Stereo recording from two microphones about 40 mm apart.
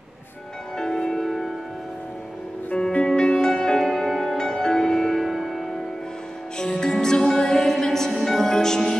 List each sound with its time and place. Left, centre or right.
0.7 s music: centre
2.9 s music: left
3.7 s music: centre
5.2 s music: centre
6.6 s music: centre